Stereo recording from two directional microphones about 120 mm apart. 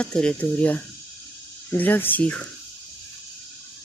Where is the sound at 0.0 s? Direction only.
10° left (ahead or behind).